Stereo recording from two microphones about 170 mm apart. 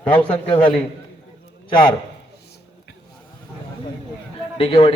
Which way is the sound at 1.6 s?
25° left (ahead or behind).